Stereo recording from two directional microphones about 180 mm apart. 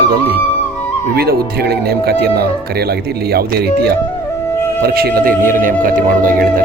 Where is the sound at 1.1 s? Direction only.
60° right (ahead or behind).